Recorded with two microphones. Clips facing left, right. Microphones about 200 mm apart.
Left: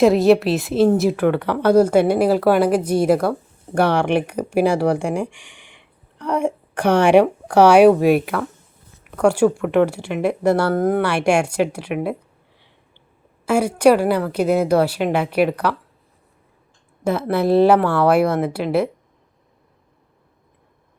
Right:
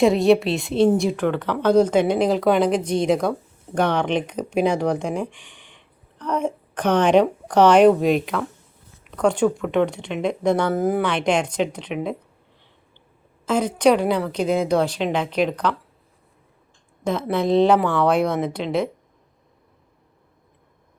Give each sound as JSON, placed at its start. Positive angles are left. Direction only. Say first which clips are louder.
{"t": 0.0, "sound": "a woman's voice", "louder": "left 3 dB", "side_deg": 0}
{"t": 10.8, "sound": "a woman's voice", "louder": "left 3 dB", "side_deg": -5}
{"t": 11.0, "sound": "a woman's voice", "louder": "left 3 dB", "side_deg": 10}
{"t": 13.4, "sound": "a woman's voice", "louder": "left 3 dB", "side_deg": 10}
{"t": 17.0, "sound": "a woman's voice", "louder": "left 3 dB", "side_deg": 5}